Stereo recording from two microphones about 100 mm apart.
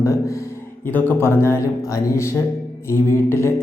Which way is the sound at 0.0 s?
35° left (ahead or behind).